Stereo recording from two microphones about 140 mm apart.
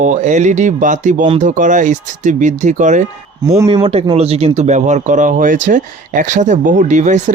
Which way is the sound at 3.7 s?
45° right (ahead or behind).